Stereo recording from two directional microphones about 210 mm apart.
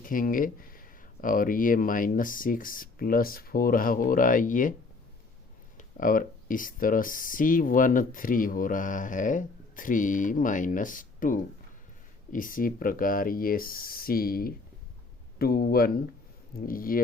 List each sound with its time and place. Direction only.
0.0 s speech: 40° left (ahead or behind)
5.7 s speech: 40° left (ahead or behind)